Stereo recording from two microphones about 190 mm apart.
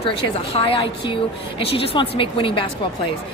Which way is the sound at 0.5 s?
25° left (ahead or behind).